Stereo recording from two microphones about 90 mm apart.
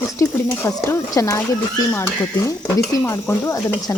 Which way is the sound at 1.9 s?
25° left (ahead or behind).